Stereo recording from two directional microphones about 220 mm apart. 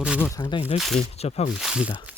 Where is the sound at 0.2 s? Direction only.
15° left (ahead or behind).